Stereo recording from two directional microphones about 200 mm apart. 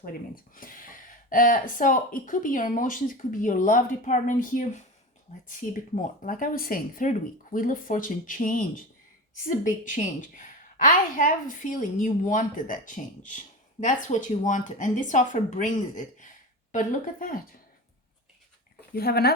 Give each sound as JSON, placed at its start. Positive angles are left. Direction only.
{"t": 0.0, "sound": "speech", "side_deg": 45}
{"t": 18.9, "sound": "speech", "side_deg": 50}